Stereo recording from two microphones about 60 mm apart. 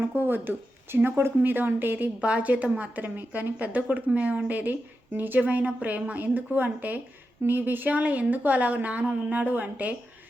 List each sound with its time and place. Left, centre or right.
0.0 s speech: right
1.4 s speech: right
2.2 s a woman's voice: right